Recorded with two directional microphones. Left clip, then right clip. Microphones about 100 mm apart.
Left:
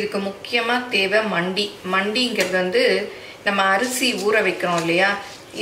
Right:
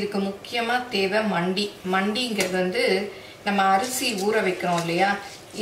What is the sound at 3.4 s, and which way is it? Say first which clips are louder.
Speech: left 2 dB; 20° left (ahead or behind).